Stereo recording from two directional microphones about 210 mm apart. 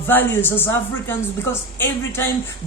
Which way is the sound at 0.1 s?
10° left (ahead or behind).